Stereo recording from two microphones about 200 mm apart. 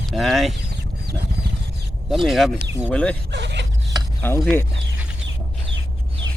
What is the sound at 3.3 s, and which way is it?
Zipper, 60° right (ahead or behind).